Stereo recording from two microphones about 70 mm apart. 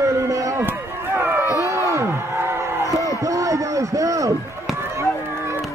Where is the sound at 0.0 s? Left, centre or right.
Right.